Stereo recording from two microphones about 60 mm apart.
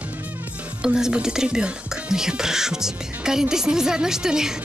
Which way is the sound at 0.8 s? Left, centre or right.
Centre.